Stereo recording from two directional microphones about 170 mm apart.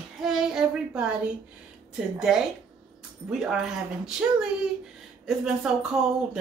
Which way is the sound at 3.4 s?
5° right (ahead or behind).